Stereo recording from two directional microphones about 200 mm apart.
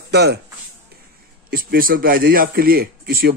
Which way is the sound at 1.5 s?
45° right (ahead or behind).